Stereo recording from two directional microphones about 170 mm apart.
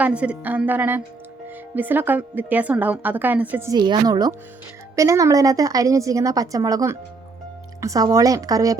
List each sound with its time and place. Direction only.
0.0 s a woman's voice: 5° right (ahead or behind)
3.8 s a woman's voice: 25° right (ahead or behind)